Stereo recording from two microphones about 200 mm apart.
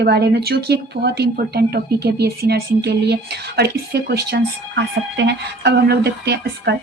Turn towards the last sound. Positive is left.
turn(degrees=-55)  # may be behind; listen again after turning